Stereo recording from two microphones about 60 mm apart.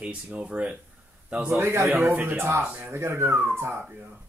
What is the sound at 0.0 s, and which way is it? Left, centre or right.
Speech, centre.